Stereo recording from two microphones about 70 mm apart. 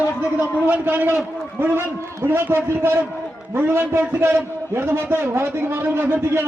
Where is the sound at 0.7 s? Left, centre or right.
Right.